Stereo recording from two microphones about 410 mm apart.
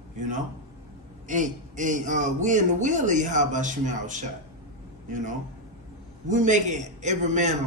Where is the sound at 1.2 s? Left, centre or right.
Centre.